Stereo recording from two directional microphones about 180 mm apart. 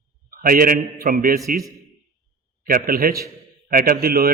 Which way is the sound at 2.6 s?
50° right (ahead or behind).